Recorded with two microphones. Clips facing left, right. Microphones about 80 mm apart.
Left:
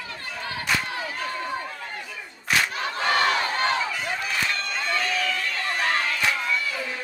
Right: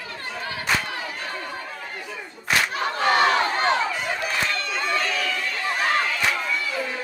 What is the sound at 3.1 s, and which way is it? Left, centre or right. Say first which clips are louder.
Crowd: right 3 dB; right.